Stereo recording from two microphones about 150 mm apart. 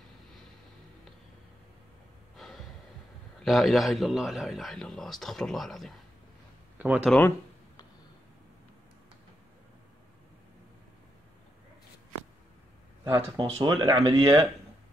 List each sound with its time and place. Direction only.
2.3 s gasp: centre (ahead or behind)
3.4 s a man's voice: centre (ahead or behind)
7.1 s speech: 10° left (ahead or behind)
13.2 s speech: 40° right (ahead or behind)